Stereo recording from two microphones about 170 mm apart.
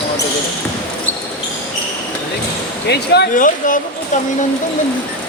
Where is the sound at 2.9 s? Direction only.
75° left (ahead or behind).